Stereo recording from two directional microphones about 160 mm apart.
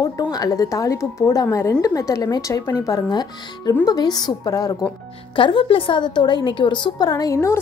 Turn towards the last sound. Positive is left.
turn(degrees=20)  # may be behind; listen again after turning